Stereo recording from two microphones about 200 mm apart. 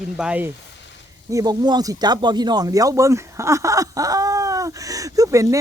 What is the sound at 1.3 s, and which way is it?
Speech, 20° right (ahead or behind).